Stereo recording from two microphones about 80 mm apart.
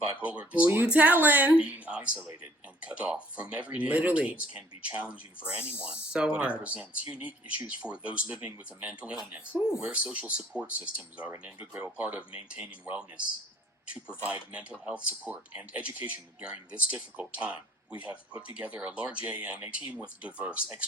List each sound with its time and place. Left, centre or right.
0.2 s speech: centre
14.5 s speech: centre